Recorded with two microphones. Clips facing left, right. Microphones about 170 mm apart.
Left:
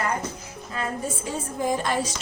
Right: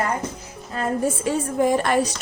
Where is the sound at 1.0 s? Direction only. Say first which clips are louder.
Right 8 dB; 65° right (ahead or behind).